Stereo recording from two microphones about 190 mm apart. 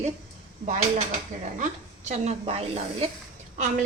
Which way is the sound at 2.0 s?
35° right (ahead or behind).